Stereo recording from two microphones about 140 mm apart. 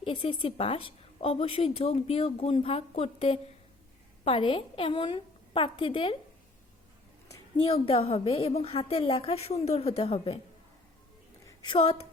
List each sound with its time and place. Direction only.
0.0 s a woman's voice: 40° left (ahead or behind)
7.5 s a woman's voice: 40° left (ahead or behind)
11.4 s a woman's voice: 35° left (ahead or behind)